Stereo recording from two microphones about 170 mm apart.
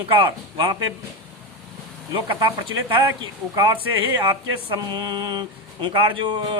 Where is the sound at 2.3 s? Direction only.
30° right (ahead or behind).